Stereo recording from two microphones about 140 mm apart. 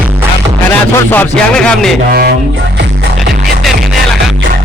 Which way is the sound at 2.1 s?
90° right.